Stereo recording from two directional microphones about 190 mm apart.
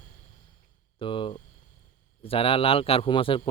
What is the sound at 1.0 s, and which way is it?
Speech, 25° left (ahead or behind).